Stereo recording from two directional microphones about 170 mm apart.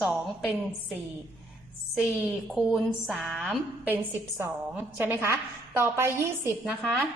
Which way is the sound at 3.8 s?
10° right (ahead or behind).